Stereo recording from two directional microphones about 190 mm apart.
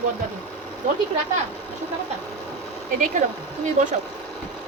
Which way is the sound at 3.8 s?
40° right (ahead or behind).